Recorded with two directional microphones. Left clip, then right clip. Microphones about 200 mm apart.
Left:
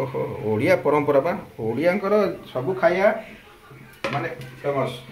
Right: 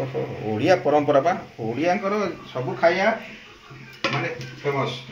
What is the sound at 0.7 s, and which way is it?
Speech, 35° left (ahead or behind).